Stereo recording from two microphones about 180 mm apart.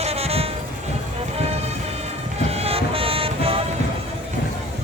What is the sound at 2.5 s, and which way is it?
Music, 35° right (ahead or behind).